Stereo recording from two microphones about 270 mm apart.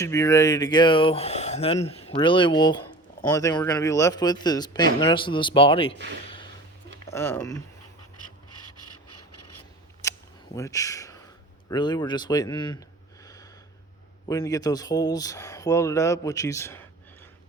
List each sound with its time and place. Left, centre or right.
0.0 s speech: centre
7.1 s speech: centre
8.4 s filing: left
10.0 s camera: centre
11.7 s speech: centre
14.3 s speech: centre